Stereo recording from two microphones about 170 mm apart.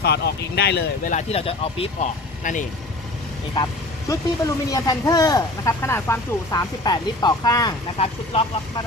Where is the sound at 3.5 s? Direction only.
20° left (ahead or behind).